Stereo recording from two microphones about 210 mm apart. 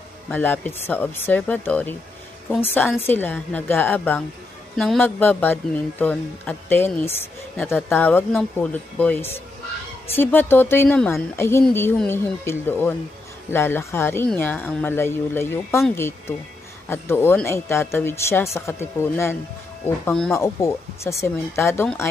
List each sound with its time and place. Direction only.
0.3 s speech: 10° left (ahead or behind)